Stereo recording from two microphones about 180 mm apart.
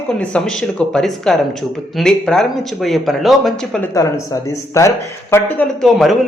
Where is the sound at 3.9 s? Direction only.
15° left (ahead or behind).